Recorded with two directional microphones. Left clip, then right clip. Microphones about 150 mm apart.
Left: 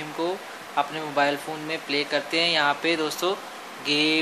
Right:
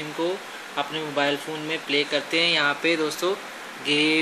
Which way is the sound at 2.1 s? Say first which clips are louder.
Left 1 dB; 40° left (ahead or behind).